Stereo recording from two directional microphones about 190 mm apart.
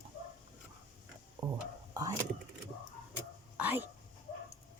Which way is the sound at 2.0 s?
20° right (ahead or behind).